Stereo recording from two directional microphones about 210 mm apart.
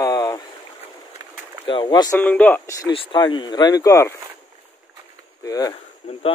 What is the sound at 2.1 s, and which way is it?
Speech, 5° left (ahead or behind).